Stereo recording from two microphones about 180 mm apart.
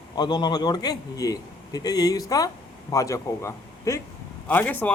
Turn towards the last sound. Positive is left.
turn(degrees=10)  # may be behind; listen again after turning